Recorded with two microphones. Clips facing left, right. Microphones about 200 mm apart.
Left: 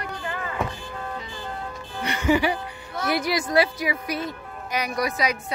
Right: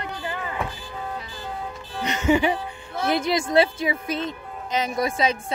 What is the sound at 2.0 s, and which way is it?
Music, 20° right (ahead or behind).